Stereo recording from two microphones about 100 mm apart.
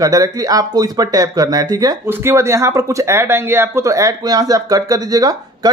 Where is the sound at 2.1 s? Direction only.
25° right (ahead or behind).